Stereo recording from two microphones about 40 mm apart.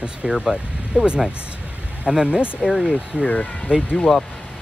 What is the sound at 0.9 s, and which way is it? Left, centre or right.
Speech, right.